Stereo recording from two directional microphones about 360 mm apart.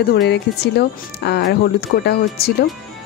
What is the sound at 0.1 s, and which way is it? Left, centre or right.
Speech, left.